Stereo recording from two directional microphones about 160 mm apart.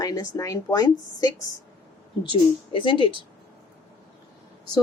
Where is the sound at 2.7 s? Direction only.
30° left (ahead or behind).